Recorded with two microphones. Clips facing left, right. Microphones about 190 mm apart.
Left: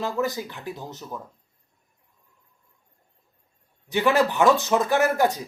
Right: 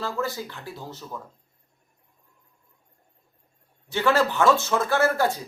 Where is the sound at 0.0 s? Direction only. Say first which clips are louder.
Left 3 dB; 15° left (ahead or behind).